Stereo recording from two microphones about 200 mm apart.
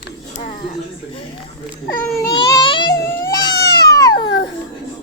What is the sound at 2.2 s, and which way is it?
Baby cry, 15° left (ahead or behind).